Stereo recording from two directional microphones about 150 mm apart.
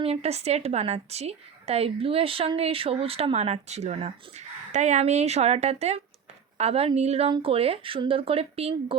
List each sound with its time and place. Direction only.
0.0 s a woman's voice: 45° right (ahead or behind)